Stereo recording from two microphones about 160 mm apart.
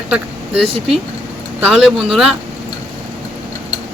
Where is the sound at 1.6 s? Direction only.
5° right (ahead or behind).